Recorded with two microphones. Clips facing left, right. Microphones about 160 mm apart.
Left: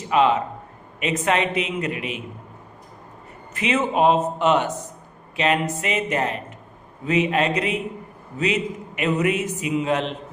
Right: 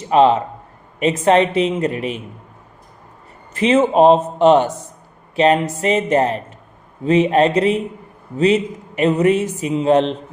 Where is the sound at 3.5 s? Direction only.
30° right (ahead or behind).